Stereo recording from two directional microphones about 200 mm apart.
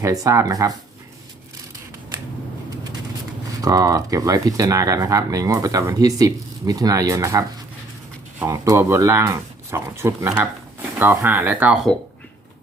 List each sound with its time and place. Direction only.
0.0 s speech: 15° right (ahead or behind)
3.6 s speech: 20° right (ahead or behind)
8.4 s speech: 15° right (ahead or behind)